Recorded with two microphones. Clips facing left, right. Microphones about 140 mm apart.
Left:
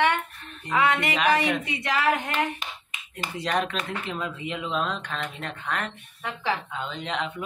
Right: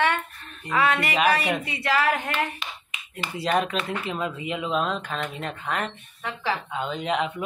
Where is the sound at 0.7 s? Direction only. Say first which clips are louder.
Even; 20° left (ahead or behind).